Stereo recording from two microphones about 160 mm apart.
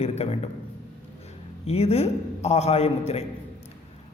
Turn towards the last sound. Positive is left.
turn(degrees=40)  # may be behind; listen again after turning